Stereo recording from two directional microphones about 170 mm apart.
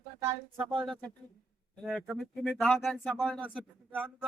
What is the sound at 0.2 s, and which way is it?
Speech, 20° right (ahead or behind).